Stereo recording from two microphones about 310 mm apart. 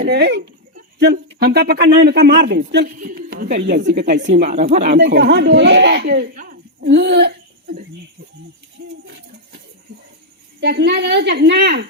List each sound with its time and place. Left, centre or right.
0.0 s speech: right
10.6 s speech: right